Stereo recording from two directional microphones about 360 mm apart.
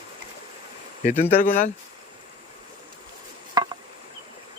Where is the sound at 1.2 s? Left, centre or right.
Left.